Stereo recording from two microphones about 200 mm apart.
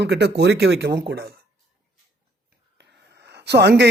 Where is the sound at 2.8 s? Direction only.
60° right (ahead or behind).